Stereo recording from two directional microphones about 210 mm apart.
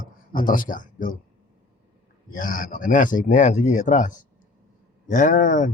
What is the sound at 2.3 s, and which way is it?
Speech, 40° left (ahead or behind).